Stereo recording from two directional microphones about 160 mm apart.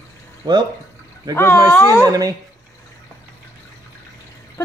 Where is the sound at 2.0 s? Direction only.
25° right (ahead or behind).